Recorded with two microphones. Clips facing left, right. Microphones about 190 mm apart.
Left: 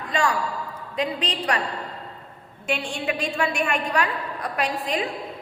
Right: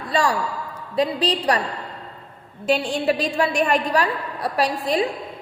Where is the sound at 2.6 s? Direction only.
35° right (ahead or behind).